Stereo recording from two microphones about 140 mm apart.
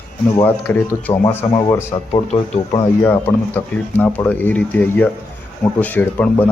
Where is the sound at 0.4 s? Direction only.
10° left (ahead or behind).